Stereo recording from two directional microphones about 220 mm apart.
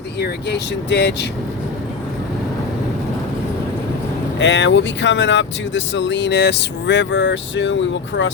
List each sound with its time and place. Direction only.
0.2 s speech: 50° left (ahead or behind)
4.4 s speech: 55° left (ahead or behind)